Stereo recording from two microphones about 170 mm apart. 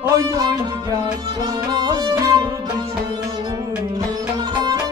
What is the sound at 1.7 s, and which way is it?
Music, 25° right (ahead or behind).